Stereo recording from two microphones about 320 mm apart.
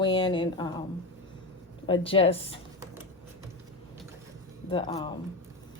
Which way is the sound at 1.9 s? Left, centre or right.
Centre.